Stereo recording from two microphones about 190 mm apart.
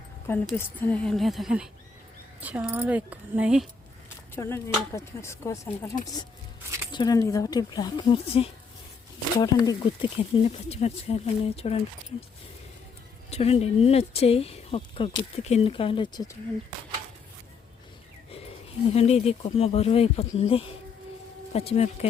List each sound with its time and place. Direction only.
0.5 s a woman's voice: 10° left (ahead or behind)
4.4 s speech: 15° left (ahead or behind); by 11.8 s 30° left (ahead or behind)
13.3 s speech: 30° left (ahead or behind)
18.9 s speech: 35° left (ahead or behind)